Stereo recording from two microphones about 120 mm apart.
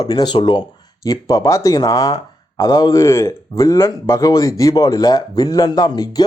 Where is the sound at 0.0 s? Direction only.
35° left (ahead or behind).